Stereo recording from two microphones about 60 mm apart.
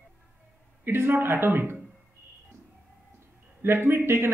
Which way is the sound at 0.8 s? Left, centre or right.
Right.